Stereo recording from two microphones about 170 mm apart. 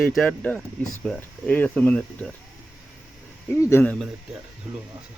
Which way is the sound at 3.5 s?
15° left (ahead or behind).